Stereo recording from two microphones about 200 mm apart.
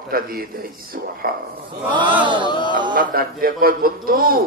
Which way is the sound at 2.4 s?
20° left (ahead or behind).